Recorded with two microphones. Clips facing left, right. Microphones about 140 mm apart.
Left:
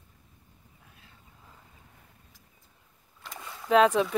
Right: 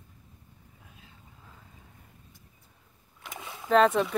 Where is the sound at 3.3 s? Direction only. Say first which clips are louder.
Right 1 dB; 15° right (ahead or behind).